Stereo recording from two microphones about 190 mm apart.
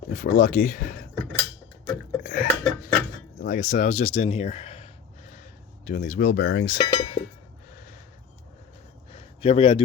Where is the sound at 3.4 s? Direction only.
40° left (ahead or behind).